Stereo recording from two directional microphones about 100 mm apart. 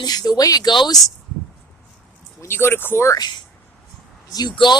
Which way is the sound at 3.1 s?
45° left (ahead or behind).